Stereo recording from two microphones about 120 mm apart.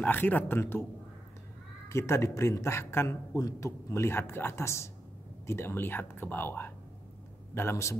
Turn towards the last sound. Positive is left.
turn(degrees=20)  # may be behind; listen again after turning